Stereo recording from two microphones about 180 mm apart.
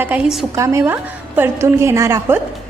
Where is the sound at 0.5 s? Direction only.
15° right (ahead or behind).